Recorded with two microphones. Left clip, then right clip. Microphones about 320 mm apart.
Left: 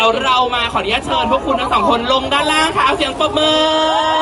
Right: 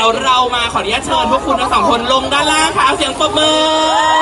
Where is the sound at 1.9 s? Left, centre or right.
Centre.